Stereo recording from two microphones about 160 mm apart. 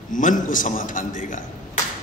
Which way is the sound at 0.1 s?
55° left (ahead or behind).